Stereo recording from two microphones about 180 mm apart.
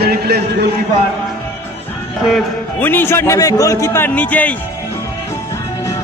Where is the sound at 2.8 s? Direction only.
10° left (ahead or behind).